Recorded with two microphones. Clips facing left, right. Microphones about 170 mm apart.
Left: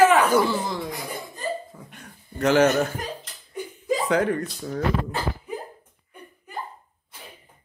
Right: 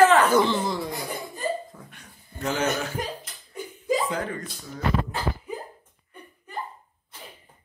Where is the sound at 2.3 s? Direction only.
75° left (ahead or behind).